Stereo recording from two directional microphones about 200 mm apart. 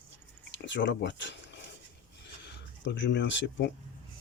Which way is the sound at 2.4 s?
60° left (ahead or behind).